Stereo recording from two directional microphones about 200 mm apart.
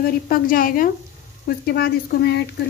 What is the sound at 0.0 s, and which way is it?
A woman's voice, 45° left (ahead or behind).